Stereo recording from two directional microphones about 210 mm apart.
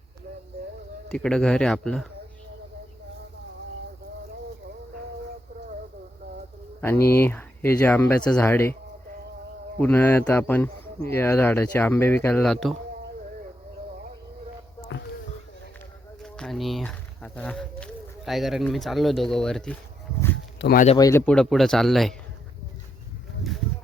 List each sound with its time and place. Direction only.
1.1 s speech: 5° left (ahead or behind)
6.8 s speech: 10° left (ahead or behind)
9.7 s speech: 10° left (ahead or behind)
16.2 s a sound: centre (ahead or behind)
18.3 s speech: centre (ahead or behind)
20.6 s speech: 50° left (ahead or behind)
20.8 s speech: 25° left (ahead or behind)
21.1 s speech: 10° left (ahead or behind)
23.4 s a sound: centre (ahead or behind)